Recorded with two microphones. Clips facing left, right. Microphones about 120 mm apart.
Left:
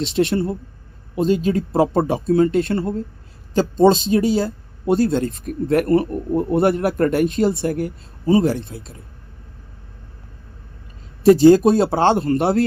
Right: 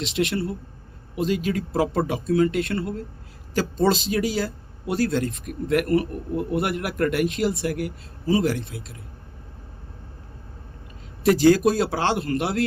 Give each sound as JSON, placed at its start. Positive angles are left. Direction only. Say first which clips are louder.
{"t": 0.1, "sound": "a man's voice", "louder": "left 5 dB", "side_deg": 35}
{"t": 11.2, "sound": "speech", "louder": "left 6 dB", "side_deg": 30}